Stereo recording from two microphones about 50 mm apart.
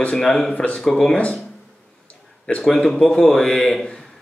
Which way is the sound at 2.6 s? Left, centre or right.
Centre.